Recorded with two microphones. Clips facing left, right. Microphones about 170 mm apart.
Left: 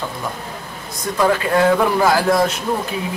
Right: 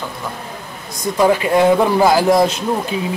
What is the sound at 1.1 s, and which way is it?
Speech, 15° right (ahead or behind).